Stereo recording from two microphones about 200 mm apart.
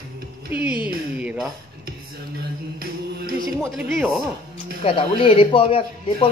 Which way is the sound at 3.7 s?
5° right (ahead or behind).